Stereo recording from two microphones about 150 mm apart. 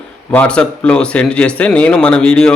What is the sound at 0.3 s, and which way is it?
Speech, 10° left (ahead or behind).